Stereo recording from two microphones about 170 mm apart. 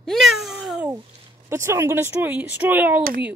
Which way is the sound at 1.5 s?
15° right (ahead or behind).